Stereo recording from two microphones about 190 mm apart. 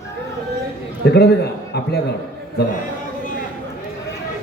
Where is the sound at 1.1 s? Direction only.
60° left (ahead or behind).